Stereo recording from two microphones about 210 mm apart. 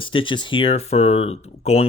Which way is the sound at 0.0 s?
25° left (ahead or behind).